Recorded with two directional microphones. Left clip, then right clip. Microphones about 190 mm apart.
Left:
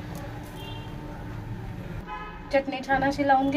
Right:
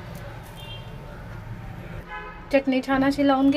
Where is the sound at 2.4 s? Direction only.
50° right (ahead or behind).